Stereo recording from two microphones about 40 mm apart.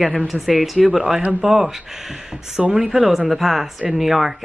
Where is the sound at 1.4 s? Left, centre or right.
Centre.